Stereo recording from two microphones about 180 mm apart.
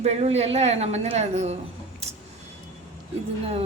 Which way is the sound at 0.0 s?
35° right (ahead or behind).